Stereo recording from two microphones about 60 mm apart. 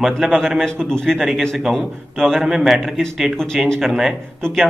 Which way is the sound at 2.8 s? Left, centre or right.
Centre.